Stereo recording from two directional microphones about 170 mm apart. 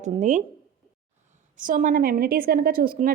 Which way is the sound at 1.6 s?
50° right (ahead or behind).